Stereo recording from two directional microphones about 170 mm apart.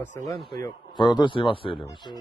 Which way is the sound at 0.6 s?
25° left (ahead or behind).